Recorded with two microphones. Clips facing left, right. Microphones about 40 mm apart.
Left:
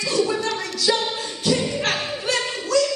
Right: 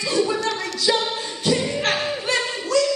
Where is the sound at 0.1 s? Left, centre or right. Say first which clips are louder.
Right 1 dB; centre.